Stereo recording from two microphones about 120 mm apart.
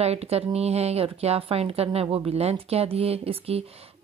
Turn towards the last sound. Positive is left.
turn(degrees=-55)  # may be behind; listen again after turning